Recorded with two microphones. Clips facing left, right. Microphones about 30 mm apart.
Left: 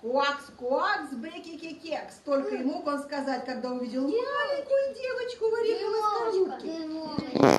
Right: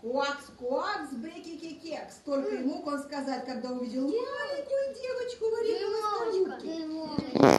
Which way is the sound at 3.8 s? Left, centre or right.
Left.